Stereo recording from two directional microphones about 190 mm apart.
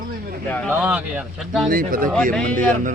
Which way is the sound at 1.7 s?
50° right (ahead or behind).